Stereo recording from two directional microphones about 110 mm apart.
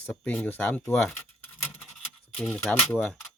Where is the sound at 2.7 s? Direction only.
5° left (ahead or behind).